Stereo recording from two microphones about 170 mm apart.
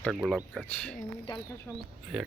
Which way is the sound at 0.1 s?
5° right (ahead or behind).